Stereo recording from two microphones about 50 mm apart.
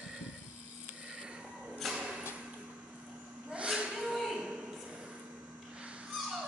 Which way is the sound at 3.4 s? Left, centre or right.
Centre.